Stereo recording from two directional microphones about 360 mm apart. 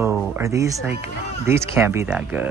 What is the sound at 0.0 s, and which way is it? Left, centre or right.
Speech, centre.